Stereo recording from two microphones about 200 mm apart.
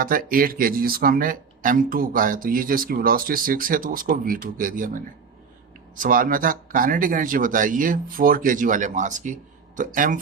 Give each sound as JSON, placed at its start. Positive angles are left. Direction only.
{"t": 0.0, "sound": "speech", "side_deg": -45}
{"t": 6.0, "sound": "speech", "side_deg": -45}